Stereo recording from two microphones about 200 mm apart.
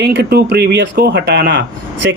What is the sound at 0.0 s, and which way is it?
Speech, 55° right (ahead or behind).